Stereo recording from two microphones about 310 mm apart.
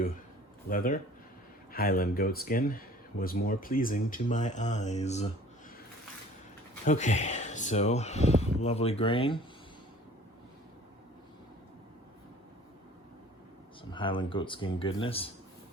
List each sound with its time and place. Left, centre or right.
1.7 s speech: left
6.8 s speech: left
13.9 s speech: centre